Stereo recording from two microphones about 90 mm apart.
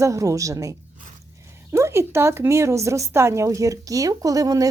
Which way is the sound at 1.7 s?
30° right (ahead or behind).